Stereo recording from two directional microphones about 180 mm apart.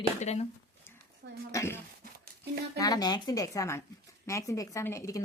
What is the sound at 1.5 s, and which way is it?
Speech, 15° left (ahead or behind).